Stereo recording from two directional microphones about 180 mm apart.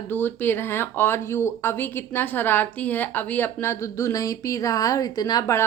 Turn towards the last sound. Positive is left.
turn(degrees=15)  # may be behind; listen again after turning